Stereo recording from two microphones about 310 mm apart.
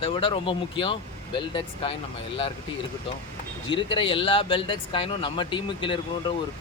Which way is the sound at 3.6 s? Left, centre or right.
Centre.